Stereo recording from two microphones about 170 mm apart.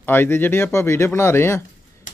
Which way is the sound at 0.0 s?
10° left (ahead or behind).